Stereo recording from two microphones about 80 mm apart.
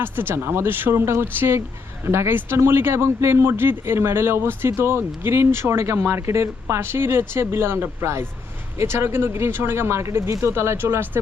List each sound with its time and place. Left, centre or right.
0.0 s speech: right